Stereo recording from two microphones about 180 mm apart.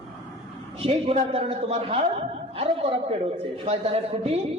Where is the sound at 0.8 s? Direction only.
35° right (ahead or behind).